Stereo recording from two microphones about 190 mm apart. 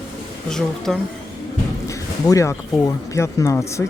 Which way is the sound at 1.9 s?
15° left (ahead or behind).